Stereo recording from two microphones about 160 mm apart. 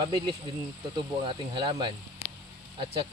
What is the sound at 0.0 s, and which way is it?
Speech, 30° right (ahead or behind).